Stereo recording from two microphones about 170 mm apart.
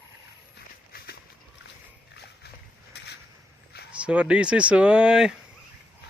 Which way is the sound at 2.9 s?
80° left.